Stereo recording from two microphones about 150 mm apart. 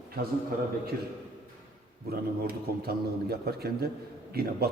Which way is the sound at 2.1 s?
90° right.